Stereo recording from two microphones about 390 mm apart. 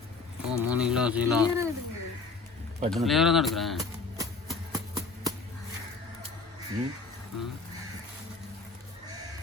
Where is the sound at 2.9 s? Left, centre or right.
Centre.